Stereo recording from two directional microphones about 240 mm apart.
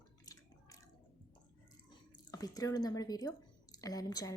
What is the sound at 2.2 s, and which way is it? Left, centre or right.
Speech, centre.